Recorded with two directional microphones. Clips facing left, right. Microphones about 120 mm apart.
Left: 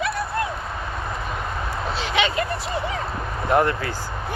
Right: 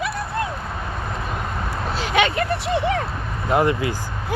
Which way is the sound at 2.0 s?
50° right (ahead or behind).